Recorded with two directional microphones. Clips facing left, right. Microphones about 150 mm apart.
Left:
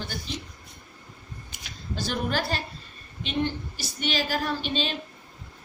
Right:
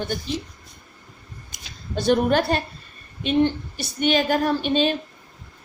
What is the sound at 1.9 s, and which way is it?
A woman's voice, 55° right (ahead or behind).